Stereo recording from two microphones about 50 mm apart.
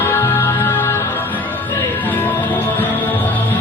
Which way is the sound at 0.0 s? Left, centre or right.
Left.